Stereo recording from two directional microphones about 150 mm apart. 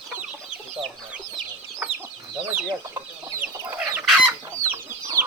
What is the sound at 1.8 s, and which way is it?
Chicken, 10° right (ahead or behind).